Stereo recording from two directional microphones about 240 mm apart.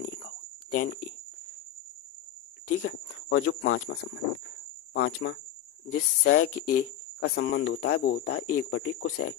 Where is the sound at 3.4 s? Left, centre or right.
Left.